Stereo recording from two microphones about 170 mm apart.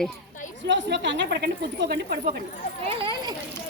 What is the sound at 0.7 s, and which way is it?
A woman's voice, 90° right.